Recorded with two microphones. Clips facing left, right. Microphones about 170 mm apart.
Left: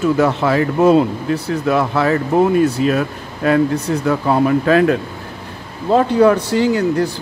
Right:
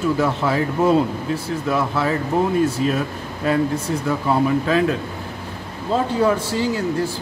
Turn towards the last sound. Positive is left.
turn(degrees=70)  # may be behind; listen again after turning